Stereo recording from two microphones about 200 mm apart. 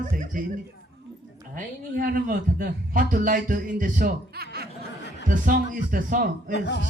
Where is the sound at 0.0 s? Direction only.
40° right (ahead or behind).